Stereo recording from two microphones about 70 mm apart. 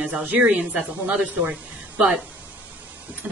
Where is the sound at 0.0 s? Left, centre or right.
Right.